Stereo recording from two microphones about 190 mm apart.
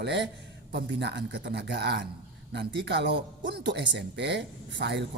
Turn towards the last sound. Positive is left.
turn(degrees=-65)  # may be behind; listen again after turning